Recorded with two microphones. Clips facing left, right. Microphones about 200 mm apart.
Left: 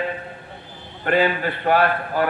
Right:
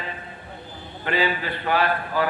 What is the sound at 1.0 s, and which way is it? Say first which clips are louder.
A man's voice: left 5 dB; 50° left (ahead or behind).